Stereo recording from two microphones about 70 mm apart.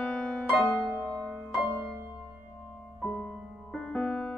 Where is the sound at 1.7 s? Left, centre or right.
Right.